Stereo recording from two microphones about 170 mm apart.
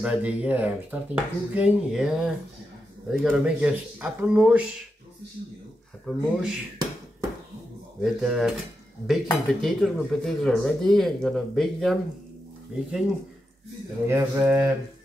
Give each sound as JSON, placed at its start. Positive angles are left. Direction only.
{"t": 0.0, "sound": "speech", "side_deg": -5}
{"t": 6.0, "sound": "speech", "side_deg": -5}
{"t": 8.0, "sound": "speech", "side_deg": 0}
{"t": 14.0, "sound": "speech", "side_deg": -10}